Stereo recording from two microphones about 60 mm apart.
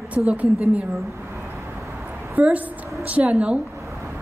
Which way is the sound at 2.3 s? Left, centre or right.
Right.